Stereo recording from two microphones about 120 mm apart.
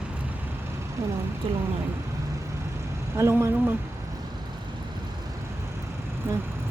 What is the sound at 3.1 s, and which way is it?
Speech, 25° right (ahead or behind).